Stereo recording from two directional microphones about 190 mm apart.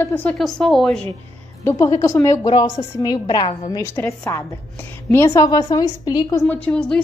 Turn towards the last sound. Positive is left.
turn(degrees=5)  # may be behind; listen again after turning